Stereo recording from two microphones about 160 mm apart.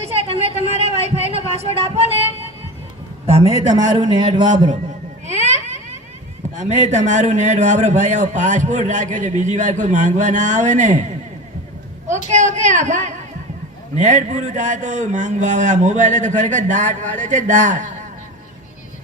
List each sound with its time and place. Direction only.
0.0 s a sound: 40° right (ahead or behind)
1.5 s speech: 40° right (ahead or behind)
3.2 s a man's voice: 40° right (ahead or behind)
3.8 s speech: 25° right (ahead or behind)
5.2 s a sound: 45° right (ahead or behind)
6.6 s a man's voice: 45° right (ahead or behind)
12.3 s a man's voice: 45° right (ahead or behind)